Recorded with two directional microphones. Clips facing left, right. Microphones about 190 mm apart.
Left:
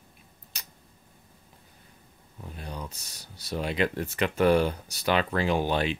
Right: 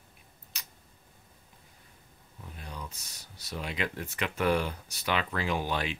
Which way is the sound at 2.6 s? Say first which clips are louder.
Left 4 dB; 35° left (ahead or behind).